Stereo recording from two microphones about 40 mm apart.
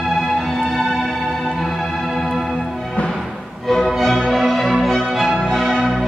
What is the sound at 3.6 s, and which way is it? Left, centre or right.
Music, centre.